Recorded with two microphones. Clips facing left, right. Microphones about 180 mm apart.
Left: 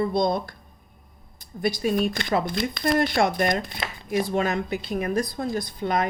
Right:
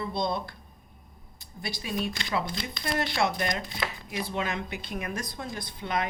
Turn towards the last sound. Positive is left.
turn(degrees=40)  # may be behind; listen again after turning